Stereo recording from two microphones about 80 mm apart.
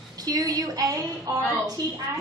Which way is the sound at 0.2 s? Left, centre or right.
Right.